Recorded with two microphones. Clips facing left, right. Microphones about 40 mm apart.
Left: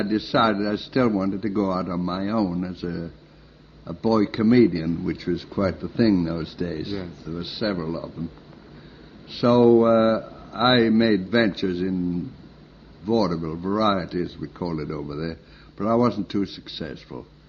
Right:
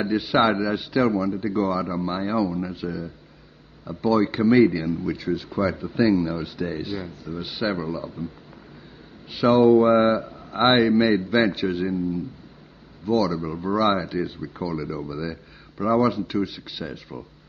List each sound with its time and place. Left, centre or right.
0.0 s speech: centre
0.9 s speech: centre
5.0 s speech: centre
9.3 s speech: centre
10.2 s a sound: centre
10.7 s speech: centre
13.0 s speech: centre
13.4 s speech: centre